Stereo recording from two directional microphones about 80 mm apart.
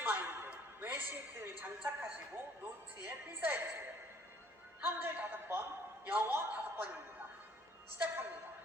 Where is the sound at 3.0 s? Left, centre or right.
Right.